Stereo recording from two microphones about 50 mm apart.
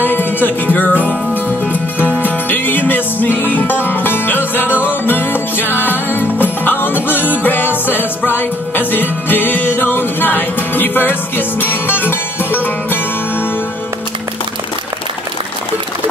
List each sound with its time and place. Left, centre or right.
0.0 s music: left